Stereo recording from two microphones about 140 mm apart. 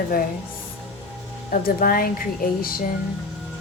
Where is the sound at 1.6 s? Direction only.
90° left.